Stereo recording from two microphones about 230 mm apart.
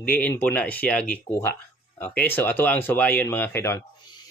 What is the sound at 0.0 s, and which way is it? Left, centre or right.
Speech, centre.